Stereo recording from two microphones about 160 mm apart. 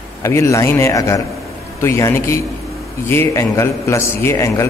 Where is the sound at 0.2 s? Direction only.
20° left (ahead or behind).